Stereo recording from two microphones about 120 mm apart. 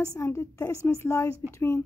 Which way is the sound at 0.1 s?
25° left (ahead or behind).